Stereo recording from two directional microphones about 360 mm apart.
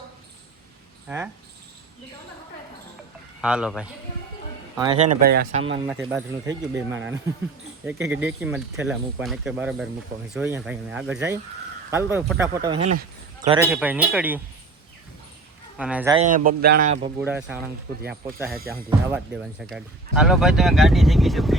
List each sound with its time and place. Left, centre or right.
1.0 s speech: centre
3.4 s speech: centre
4.8 s speech: centre
5.8 s speech: centre
15.8 s speech: centre
16.3 s speech: right
17.2 s speech: centre